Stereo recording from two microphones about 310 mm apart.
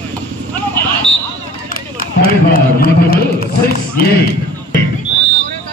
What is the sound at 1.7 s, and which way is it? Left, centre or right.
Run, left.